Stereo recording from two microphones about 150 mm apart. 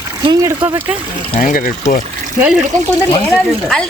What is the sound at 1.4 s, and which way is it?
Speech, 65° left (ahead or behind).